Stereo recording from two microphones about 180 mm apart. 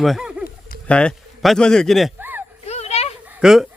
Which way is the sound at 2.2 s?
10° right (ahead or behind).